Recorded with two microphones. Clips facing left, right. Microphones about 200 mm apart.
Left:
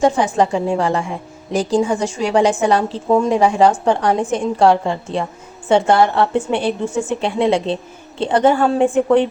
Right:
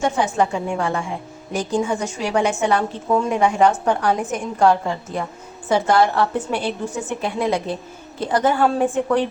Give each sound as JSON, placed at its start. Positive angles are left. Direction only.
{"t": 0.0, "sound": "a woman's voice", "side_deg": 35}